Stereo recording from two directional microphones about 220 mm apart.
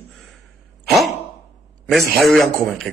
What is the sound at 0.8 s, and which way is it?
Sigh, centre (ahead or behind).